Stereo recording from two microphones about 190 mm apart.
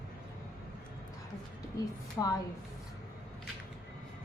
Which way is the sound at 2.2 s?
20° left (ahead or behind).